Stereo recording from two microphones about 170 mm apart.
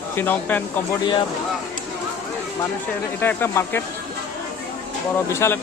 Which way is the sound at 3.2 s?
10° left (ahead or behind).